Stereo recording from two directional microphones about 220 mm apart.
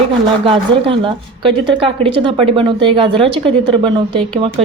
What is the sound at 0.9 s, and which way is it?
Speech, 25° right (ahead or behind).